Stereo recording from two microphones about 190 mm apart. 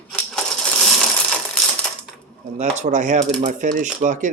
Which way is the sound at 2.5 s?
40° right (ahead or behind).